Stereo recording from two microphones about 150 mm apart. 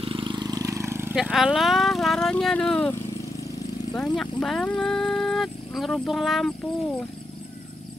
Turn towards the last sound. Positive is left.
turn(degrees=0)  # may be behind; listen again after turning